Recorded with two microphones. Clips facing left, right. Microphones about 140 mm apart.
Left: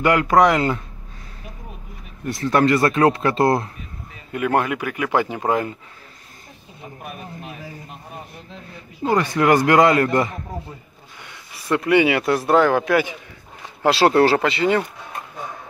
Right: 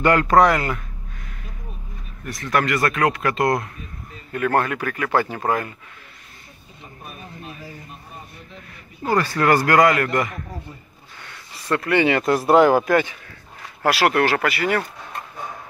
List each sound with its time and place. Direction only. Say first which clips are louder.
0.0 s a man's voice: even; 10° left (ahead or behind)
2.2 s speech: left 5 dB; 30° left (ahead or behind)
4.3 s a man's voice: left 1 dB; 15° left (ahead or behind)
9.0 s speech: left 2 dB; 20° left (ahead or behind)
11.7 s speech: left 3 dB; 20° left (ahead or behind)
12.0 s speech: even; 5° left (ahead or behind)
12.5 s a man's voice: right 2 dB; 15° right (ahead or behind)
13.8 s speech: left 3 dB; 25° left (ahead or behind)